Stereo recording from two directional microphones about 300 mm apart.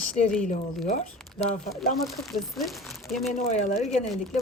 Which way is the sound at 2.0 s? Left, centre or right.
Centre.